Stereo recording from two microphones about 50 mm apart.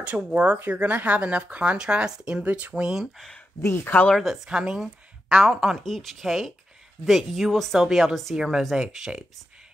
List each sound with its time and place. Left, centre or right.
0.3 s speech: right
2.4 s speech: right
2.7 s a woman's voice: centre
3.6 s speech: left
4.1 s speech: centre
4.5 s a woman's voice: centre
5.9 s speech: centre
8.4 s a woman's voice: centre